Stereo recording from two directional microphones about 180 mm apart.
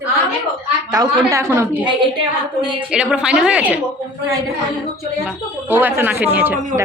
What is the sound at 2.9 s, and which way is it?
Speech, 5° right (ahead or behind).